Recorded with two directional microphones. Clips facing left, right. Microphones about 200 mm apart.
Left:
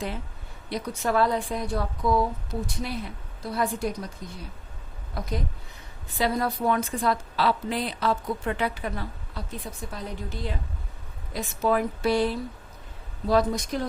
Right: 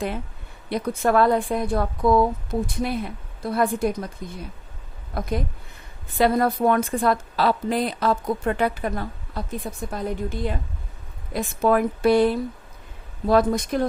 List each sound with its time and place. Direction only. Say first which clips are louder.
0.7 s speech: right 5 dB; 55° right (ahead or behind)
5.1 s a woman's voice: right 5 dB; 55° right (ahead or behind)